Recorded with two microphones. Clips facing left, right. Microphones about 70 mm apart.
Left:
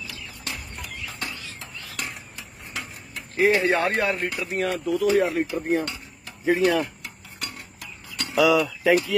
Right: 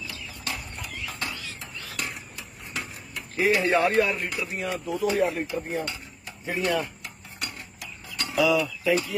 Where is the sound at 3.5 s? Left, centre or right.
Left.